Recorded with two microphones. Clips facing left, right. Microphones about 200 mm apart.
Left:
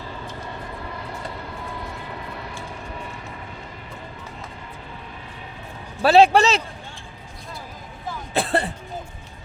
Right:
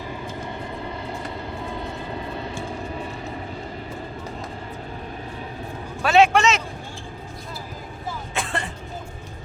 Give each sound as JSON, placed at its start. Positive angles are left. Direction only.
{"t": 0.8, "sound": "vehicle", "side_deg": -25}
{"t": 6.0, "sound": "a man's voice", "side_deg": 35}
{"t": 8.3, "sound": "a sound", "side_deg": 35}